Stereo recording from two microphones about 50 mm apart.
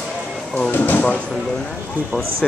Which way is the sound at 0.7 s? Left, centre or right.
Left.